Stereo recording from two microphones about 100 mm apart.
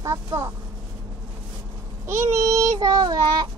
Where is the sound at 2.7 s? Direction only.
45° right (ahead or behind).